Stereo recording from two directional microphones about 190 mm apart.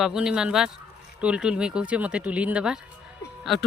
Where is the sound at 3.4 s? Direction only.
Centre (ahead or behind).